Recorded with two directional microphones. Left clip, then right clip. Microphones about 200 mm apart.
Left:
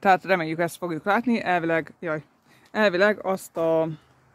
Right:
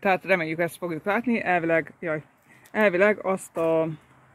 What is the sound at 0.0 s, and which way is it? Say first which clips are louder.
Speech: left 2 dB; 15° left (ahead or behind).